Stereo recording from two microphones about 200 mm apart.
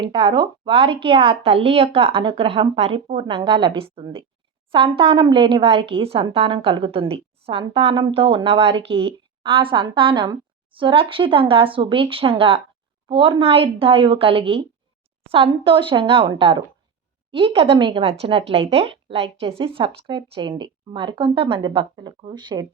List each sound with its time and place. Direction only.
0.0 s a woman's voice: 25° right (ahead or behind)